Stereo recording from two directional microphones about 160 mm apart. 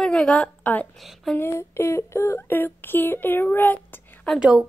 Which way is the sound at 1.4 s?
15° left (ahead or behind).